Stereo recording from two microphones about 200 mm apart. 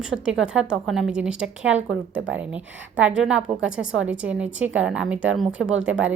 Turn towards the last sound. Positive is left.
turn(degrees=-5)  # may be behind; listen again after turning